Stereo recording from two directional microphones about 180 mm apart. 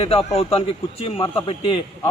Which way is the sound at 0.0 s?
35° left (ahead or behind).